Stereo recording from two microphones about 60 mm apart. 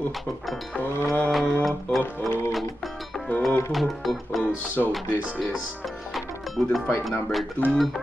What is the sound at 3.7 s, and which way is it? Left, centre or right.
Music, centre.